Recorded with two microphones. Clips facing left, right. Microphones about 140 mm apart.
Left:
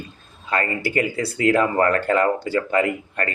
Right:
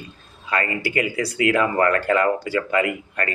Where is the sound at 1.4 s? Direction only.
40° left (ahead or behind).